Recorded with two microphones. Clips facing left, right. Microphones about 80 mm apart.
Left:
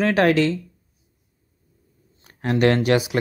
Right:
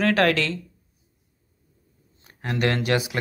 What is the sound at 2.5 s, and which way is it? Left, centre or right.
Speech, left.